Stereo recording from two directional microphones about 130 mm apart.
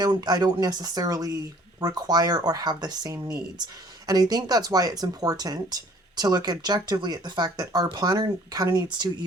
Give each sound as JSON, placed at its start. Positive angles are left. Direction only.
{"t": 0.0, "sound": "speech", "side_deg": -30}